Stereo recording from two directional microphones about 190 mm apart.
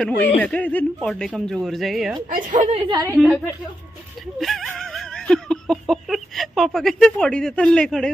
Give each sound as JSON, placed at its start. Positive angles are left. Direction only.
{"t": 0.0, "sound": "speech", "side_deg": 5}
{"t": 2.5, "sound": "a woman's voice", "side_deg": -30}
{"t": 4.4, "sound": "laughter", "side_deg": 0}